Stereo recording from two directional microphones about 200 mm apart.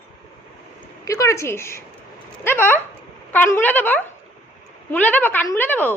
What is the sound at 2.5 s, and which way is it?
A woman's voice, 10° left (ahead or behind).